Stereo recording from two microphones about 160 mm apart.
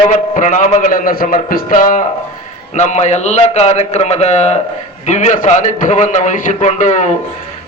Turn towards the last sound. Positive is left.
turn(degrees=50)  # may be behind; listen again after turning